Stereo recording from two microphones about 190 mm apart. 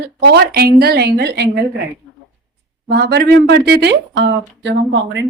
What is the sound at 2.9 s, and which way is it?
Speech, 60° right (ahead or behind).